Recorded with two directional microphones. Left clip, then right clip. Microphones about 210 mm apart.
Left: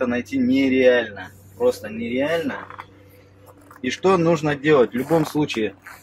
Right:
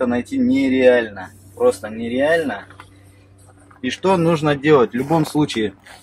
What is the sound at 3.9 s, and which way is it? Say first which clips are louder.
Speech: right 1 dB; 30° right (ahead or behind).